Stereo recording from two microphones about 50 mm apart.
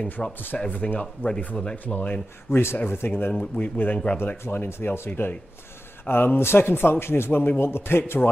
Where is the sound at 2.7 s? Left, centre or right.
Left.